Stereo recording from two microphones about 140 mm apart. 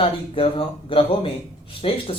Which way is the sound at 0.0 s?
40° left (ahead or behind).